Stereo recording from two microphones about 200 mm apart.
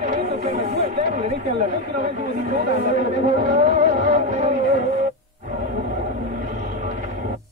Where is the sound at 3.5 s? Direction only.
35° right (ahead or behind).